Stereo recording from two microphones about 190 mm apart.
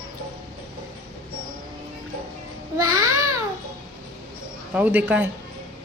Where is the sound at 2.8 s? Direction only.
15° right (ahead or behind).